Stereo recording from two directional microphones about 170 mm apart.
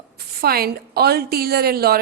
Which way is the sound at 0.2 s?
65° right (ahead or behind).